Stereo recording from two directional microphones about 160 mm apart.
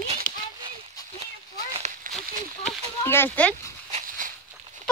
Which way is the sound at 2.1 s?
60° right (ahead or behind).